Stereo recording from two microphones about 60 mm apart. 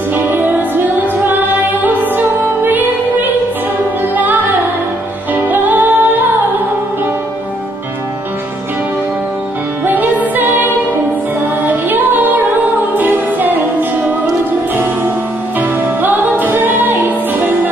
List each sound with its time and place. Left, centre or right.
0.1 s music: right
9.8 s music: right
15.8 s music: right